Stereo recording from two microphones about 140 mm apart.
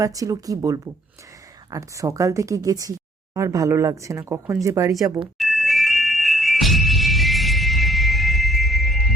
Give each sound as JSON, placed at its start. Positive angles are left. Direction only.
{"t": 0.0, "sound": "speech", "side_deg": -25}
{"t": 5.4, "sound": "music", "side_deg": 0}